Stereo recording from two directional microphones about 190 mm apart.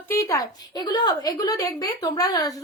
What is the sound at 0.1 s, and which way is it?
A woman's voice, 15° left (ahead or behind).